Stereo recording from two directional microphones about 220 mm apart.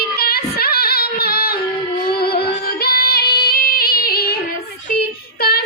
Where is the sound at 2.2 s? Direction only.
45° left (ahead or behind).